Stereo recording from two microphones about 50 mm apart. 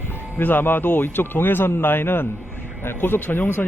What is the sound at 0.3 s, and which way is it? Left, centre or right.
Speech, left.